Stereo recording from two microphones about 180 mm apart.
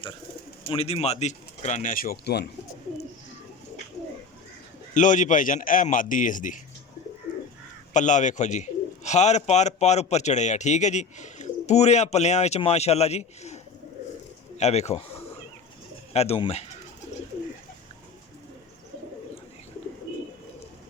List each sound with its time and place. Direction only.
0.7 s speech: 35° left (ahead or behind); by 2.5 s 65° left (ahead or behind)
4.9 s a man's voice: 45° left (ahead or behind)
7.9 s speech: 45° left (ahead or behind)
14.6 s speech: 35° left (ahead or behind)
16.1 s speech: 35° left (ahead or behind)